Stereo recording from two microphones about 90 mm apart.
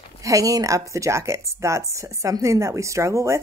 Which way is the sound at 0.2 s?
40° right (ahead or behind).